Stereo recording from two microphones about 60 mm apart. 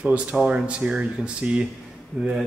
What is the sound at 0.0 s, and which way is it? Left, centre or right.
Speech, right.